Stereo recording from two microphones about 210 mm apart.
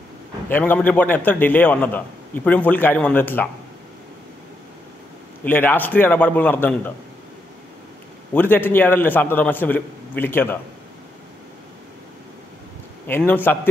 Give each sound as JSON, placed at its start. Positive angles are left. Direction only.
{"t": 0.5, "sound": "a man's voice", "side_deg": 10}
{"t": 5.4, "sound": "a man's voice", "side_deg": 10}
{"t": 8.3, "sound": "a man's voice", "side_deg": 10}
{"t": 13.3, "sound": "a man's voice", "side_deg": 10}